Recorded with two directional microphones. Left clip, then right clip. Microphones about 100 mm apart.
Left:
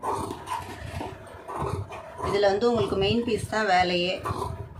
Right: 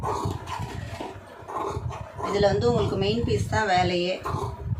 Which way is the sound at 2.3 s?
35° left (ahead or behind).